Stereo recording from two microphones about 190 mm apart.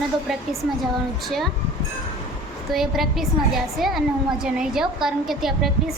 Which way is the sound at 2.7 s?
Centre (ahead or behind).